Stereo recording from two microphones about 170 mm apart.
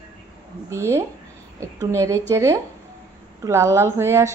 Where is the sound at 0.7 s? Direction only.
15° right (ahead or behind).